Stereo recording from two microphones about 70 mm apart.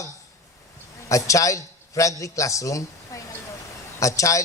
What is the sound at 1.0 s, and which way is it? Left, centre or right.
A man's voice, left.